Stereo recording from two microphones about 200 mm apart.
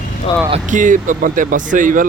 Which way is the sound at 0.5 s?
40° right (ahead or behind).